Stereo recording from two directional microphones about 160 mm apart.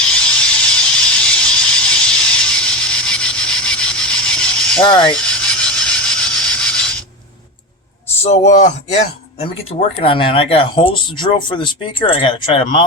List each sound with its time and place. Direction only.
0.0 s a sound: 5° left (ahead or behind)
8.2 s speech: 45° left (ahead or behind)
9.6 s speech: 35° left (ahead or behind)